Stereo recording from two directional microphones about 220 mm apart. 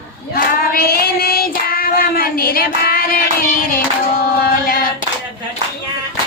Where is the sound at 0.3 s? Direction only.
45° left (ahead or behind).